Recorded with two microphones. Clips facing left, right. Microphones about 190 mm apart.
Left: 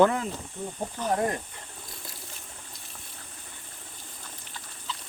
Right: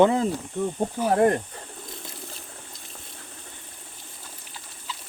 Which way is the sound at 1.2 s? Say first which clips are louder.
Right 12 dB; 60° right (ahead or behind).